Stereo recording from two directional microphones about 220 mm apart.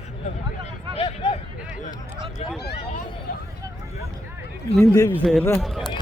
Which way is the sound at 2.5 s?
45° left (ahead or behind).